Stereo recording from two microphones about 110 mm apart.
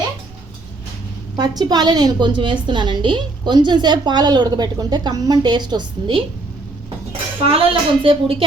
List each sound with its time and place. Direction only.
1.4 s a woman's voice: 40° right (ahead or behind)
7.6 s speech: 55° right (ahead or behind)